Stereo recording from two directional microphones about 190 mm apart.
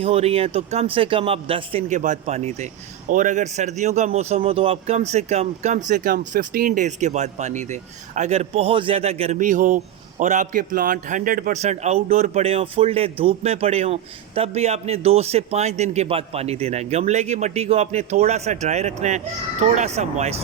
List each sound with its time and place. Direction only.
0.0 s speech: 30° right (ahead or behind)